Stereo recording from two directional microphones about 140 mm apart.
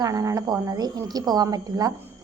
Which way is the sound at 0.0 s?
25° right (ahead or behind).